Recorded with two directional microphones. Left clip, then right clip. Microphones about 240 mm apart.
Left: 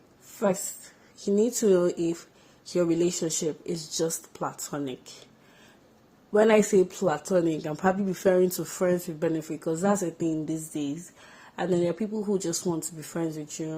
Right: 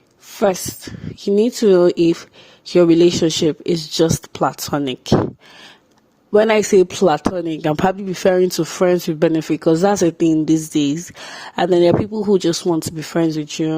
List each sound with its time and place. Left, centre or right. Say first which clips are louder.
0.4 s speech: right 10 dB; right
6.3 s speech: right 8 dB; right